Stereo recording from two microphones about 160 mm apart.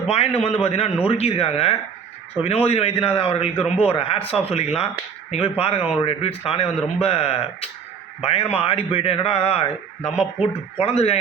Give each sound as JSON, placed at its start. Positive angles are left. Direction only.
{"t": 0.1, "sound": "speech", "side_deg": 40}
{"t": 10.0, "sound": "speech", "side_deg": -5}
{"t": 10.4, "sound": "speech", "side_deg": 40}